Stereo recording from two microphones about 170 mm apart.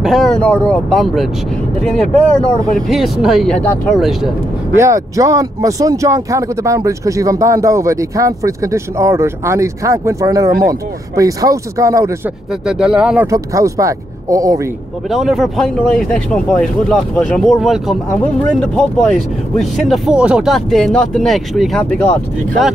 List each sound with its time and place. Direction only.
0.0 s speech: centre (ahead or behind)
3.9 s speech: centre (ahead or behind)
4.7 s speech: 20° right (ahead or behind)
12.6 s speech: 5° right (ahead or behind)
13.3 s speech: 20° right (ahead or behind)
15.0 s speech: centre (ahead or behind)